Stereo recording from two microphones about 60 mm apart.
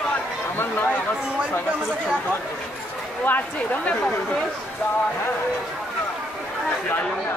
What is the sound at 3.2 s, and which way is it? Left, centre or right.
Speech, left.